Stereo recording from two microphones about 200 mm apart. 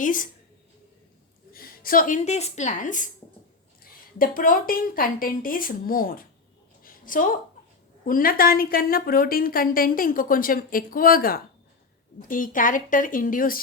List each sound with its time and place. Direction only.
0.0 s a woman's voice: 40° left (ahead or behind)
1.5 s a woman's voice: 45° left (ahead or behind)
4.2 s a woman's voice: 45° left (ahead or behind)
6.8 s a sound: 45° left (ahead or behind)
8.0 s a woman's voice: 45° left (ahead or behind)